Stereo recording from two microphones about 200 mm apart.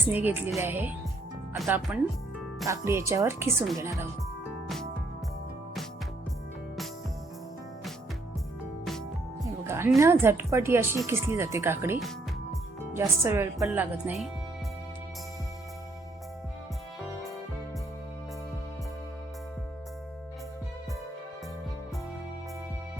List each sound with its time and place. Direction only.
0.1 s speech: 10° right (ahead or behind)
9.6 s a sound: 10° right (ahead or behind)
10.0 s speech: 10° right (ahead or behind)